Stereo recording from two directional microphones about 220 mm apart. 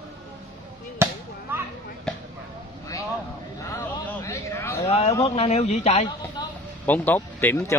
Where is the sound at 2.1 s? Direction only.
5° left (ahead or behind).